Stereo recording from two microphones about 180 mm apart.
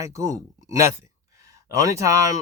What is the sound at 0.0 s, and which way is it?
Speech, 15° right (ahead or behind).